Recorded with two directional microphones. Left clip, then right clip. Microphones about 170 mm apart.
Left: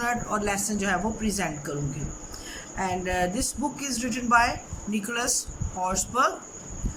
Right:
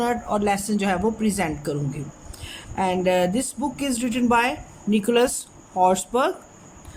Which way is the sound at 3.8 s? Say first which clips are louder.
Right 6 dB; 45° right (ahead or behind).